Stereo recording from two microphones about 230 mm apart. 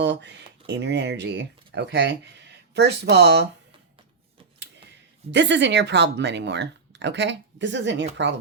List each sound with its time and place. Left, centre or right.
0.0 s speech: right
5.3 s speech: right